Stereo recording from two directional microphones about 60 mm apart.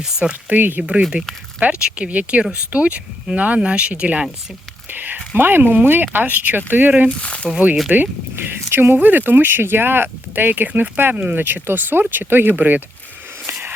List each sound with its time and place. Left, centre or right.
0.0 s speech: centre
4.9 s speech: right
7.1 s speech: centre
7.9 s speech: right
8.7 s speech: right
13.5 s a sound: right